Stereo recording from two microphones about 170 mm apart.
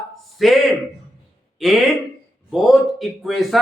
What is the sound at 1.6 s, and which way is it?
Speech, centre (ahead or behind).